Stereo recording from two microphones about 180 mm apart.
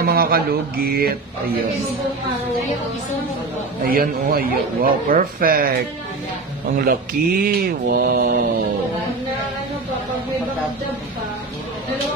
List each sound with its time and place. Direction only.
0.0 s a man's voice: 55° right (ahead or behind)
3.8 s a man's voice: 55° right (ahead or behind)
6.8 s a man's voice: 55° right (ahead or behind)